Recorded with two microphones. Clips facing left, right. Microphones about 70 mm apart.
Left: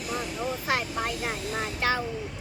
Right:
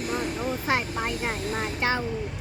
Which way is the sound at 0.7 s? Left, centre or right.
Right.